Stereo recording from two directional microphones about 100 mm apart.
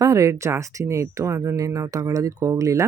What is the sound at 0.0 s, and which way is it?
Speech, 35° right (ahead or behind).